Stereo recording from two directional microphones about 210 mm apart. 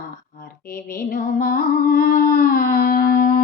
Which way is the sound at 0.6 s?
45° left (ahead or behind).